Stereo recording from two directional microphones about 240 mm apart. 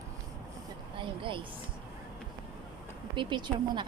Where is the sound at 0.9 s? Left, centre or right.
Right.